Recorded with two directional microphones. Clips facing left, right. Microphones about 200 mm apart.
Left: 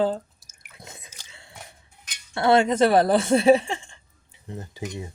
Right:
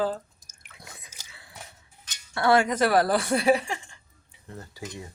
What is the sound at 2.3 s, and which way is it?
Speech, 25° left (ahead or behind).